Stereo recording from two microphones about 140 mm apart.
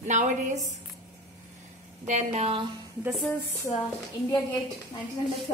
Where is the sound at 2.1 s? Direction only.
50° right (ahead or behind).